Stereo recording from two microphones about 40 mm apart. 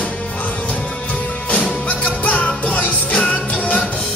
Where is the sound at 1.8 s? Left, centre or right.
Left.